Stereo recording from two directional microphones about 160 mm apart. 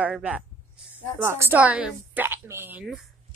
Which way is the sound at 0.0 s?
5° right (ahead or behind).